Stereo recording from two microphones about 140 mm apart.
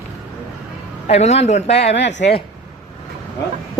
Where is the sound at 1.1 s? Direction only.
50° left (ahead or behind).